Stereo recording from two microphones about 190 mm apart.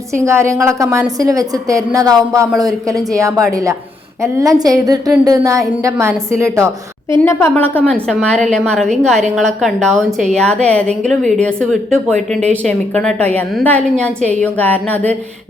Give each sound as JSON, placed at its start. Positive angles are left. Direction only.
{"t": 0.3, "sound": "a woman's voice", "side_deg": -15}
{"t": 7.3, "sound": "a woman's voice", "side_deg": 15}